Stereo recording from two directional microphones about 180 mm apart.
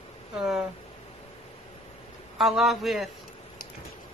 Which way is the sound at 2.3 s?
Centre (ahead or behind).